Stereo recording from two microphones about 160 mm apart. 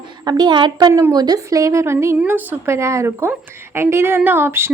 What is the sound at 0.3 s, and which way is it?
A woman's voice, 25° right (ahead or behind).